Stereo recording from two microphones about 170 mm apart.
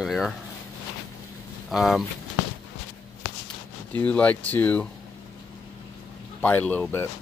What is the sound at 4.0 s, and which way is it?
Speech, 10° left (ahead or behind).